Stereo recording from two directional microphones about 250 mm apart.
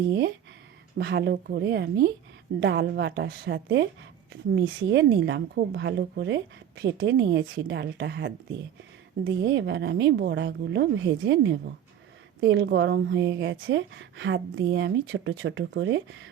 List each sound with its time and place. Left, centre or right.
0.9 s a woman's voice: right
4.9 s speech: right